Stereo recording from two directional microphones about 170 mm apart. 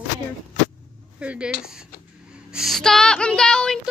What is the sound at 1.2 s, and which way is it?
A woman's voice, 5° right (ahead or behind).